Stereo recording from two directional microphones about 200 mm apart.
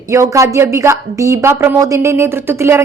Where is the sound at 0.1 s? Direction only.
15° right (ahead or behind).